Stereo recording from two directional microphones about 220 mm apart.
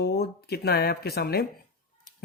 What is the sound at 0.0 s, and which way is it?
Speech, 45° left (ahead or behind).